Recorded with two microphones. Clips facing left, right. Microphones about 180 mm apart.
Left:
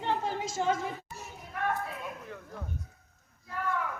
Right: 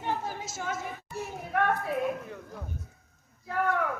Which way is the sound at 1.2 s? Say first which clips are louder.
Right 8 dB; 65° right (ahead or behind).